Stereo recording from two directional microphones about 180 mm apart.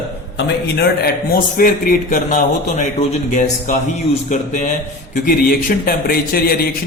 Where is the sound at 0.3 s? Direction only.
70° left (ahead or behind).